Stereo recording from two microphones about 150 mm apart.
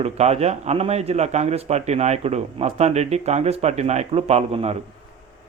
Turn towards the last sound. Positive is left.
turn(degrees=-45)  # may be behind; listen again after turning